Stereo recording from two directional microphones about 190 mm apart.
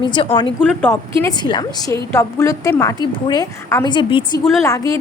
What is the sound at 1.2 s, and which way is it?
A woman's voice, 25° left (ahead or behind).